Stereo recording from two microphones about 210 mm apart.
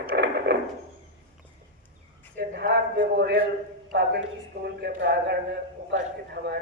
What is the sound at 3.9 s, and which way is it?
A man's voice, 50° right (ahead or behind).